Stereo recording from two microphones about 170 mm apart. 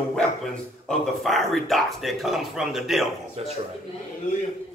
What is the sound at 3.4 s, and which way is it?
Speech, 40° right (ahead or behind).